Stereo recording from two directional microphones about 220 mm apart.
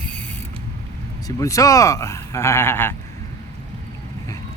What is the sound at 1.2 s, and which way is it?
Speech, 15° left (ahead or behind).